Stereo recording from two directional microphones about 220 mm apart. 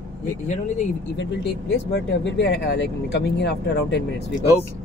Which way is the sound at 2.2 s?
55° left (ahead or behind).